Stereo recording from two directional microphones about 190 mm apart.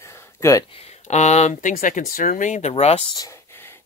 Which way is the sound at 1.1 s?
35° left (ahead or behind).